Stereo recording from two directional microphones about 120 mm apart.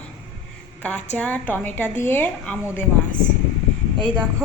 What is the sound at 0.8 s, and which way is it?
A woman's voice, 10° left (ahead or behind).